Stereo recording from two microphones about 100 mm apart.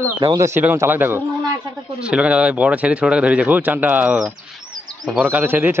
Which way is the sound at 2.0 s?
10° right (ahead or behind).